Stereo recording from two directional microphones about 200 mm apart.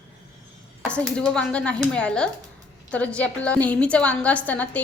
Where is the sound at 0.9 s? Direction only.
5° left (ahead or behind).